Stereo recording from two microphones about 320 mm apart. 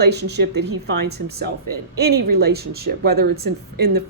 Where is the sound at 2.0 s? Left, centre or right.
Right.